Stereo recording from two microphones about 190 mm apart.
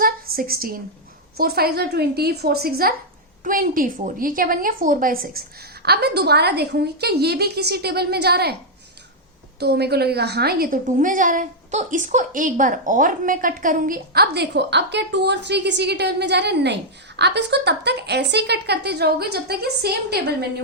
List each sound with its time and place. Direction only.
0.0 s a sound: 50° right (ahead or behind)
1.4 s a woman's voice: 55° right (ahead or behind)
9.6 s a woman's voice: 60° right (ahead or behind)